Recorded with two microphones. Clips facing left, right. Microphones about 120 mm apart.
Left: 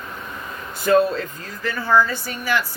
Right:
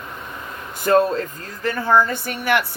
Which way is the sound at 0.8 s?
45° right (ahead or behind).